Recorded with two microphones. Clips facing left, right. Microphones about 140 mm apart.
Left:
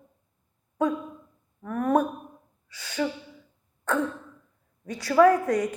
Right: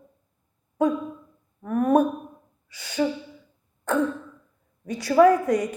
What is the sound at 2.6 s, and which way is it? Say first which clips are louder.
Gasp: right 4 dB; 15° right (ahead or behind).